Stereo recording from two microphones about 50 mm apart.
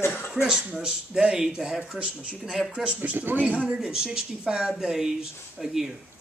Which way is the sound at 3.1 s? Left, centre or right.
Right.